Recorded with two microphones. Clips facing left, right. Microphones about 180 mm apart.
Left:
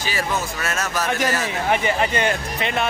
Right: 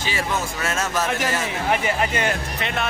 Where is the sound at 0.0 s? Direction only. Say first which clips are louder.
Left 1 dB; 25° right (ahead or behind).